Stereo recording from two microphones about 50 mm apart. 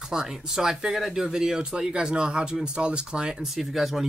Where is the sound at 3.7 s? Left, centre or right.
Centre.